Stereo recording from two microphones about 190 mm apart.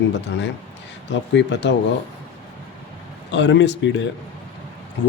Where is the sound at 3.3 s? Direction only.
70° left (ahead or behind).